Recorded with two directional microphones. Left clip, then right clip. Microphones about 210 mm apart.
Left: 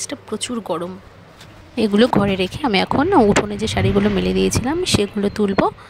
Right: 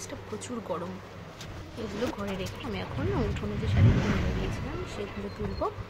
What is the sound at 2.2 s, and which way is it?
Speech, 55° left (ahead or behind).